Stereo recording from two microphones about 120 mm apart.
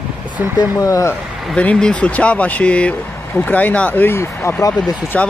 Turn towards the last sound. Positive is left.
turn(degrees=10)  # may be behind; listen again after turning